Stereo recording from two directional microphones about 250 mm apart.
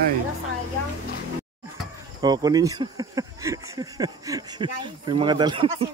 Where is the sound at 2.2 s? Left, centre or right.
Centre.